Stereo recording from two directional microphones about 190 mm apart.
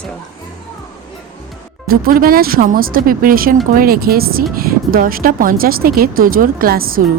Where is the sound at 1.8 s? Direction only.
50° right (ahead or behind).